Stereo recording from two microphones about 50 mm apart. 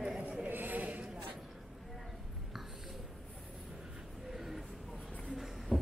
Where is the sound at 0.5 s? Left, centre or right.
Right.